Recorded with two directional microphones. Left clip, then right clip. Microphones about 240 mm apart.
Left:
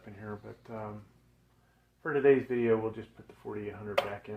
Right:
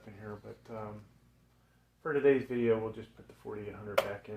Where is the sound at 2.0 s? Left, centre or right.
Left.